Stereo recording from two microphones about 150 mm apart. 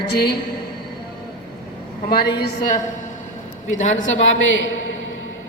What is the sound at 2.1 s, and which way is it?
Speech, 90° left.